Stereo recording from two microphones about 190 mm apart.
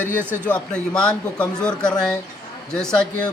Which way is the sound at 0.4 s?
5° left (ahead or behind).